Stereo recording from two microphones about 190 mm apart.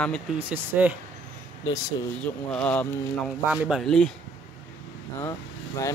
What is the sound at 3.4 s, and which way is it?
Speech, 5° right (ahead or behind).